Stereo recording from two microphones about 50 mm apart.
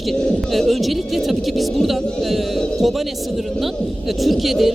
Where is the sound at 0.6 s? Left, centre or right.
Centre.